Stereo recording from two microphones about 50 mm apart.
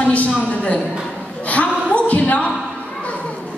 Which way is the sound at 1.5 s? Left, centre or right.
Left.